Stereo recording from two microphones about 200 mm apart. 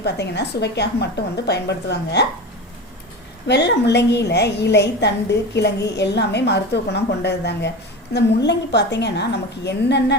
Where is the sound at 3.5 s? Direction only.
60° left (ahead or behind).